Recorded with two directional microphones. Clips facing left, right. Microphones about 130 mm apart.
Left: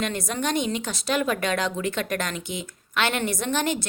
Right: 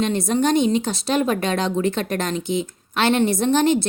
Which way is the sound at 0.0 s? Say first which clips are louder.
Right 8 dB; 25° right (ahead or behind).